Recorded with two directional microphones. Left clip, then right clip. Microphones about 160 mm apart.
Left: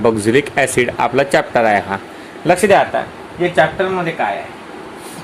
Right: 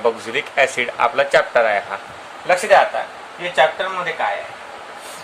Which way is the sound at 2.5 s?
75° left (ahead or behind).